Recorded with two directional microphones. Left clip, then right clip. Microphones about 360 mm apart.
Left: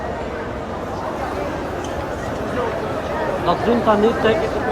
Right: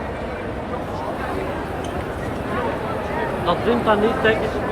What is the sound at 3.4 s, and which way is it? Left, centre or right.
Speech, left.